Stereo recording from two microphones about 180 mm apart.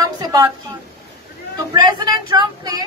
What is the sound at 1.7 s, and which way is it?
Speech, 20° right (ahead or behind).